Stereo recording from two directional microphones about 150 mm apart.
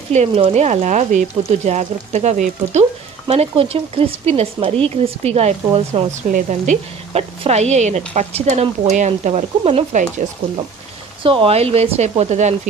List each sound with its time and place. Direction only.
0.5 s speech: 50° right (ahead or behind)
3.3 s speech: 40° right (ahead or behind)
6.3 s speech: 55° right (ahead or behind)
11.2 s speech: 40° right (ahead or behind)